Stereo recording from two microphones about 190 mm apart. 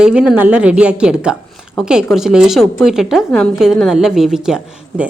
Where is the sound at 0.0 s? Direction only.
5° right (ahead or behind).